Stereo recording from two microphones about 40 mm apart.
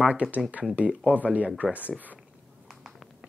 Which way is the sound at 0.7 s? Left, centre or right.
Right.